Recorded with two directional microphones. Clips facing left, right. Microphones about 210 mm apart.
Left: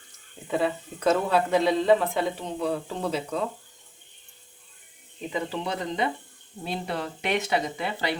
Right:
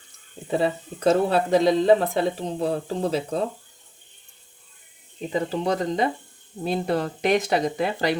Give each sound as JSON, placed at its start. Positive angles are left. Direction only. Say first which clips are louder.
{"t": 0.4, "sound": "speech", "louder": "right 3 dB", "side_deg": -35}
{"t": 5.3, "sound": "speech", "louder": "right 6 dB", "side_deg": -40}